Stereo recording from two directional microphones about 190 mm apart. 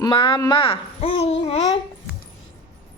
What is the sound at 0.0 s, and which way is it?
Speech, 25° left (ahead or behind).